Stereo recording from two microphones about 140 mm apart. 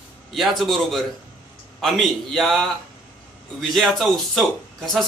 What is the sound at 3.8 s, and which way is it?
Speech, centre (ahead or behind).